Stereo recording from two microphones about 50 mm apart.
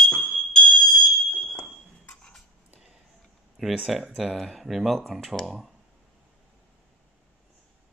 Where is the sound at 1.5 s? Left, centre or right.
Left.